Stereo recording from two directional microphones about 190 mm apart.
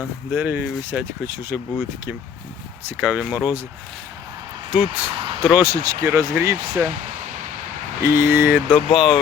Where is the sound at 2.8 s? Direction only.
5° right (ahead or behind).